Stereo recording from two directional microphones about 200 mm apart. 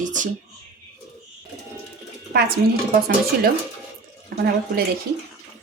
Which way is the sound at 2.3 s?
50° right (ahead or behind).